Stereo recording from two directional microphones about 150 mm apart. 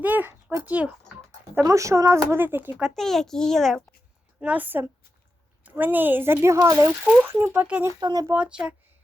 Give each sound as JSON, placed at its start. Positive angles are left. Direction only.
{"t": 0.0, "sound": "a sound", "side_deg": -10}
{"t": 1.5, "sound": "speech", "side_deg": -20}
{"t": 4.4, "sound": "speech", "side_deg": -10}
{"t": 7.9, "sound": "speech", "side_deg": -25}
{"t": 8.4, "sound": "speech", "side_deg": -5}